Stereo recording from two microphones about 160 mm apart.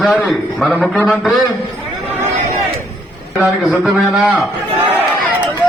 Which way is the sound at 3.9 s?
10° right (ahead or behind).